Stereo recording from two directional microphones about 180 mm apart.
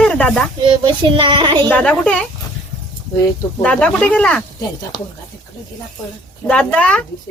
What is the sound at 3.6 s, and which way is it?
Speech, 5° left (ahead or behind).